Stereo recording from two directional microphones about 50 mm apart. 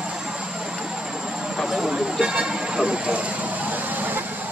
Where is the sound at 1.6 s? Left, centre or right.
Centre.